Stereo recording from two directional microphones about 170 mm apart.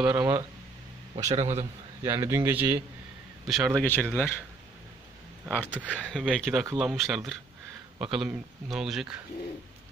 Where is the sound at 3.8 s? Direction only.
10° left (ahead or behind).